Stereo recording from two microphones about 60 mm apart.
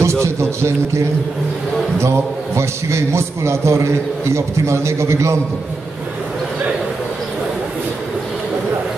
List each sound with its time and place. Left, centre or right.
0.0 s a man's voice: right